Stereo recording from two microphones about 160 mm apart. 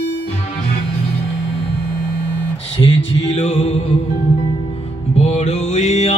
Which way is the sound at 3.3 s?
45° left (ahead or behind).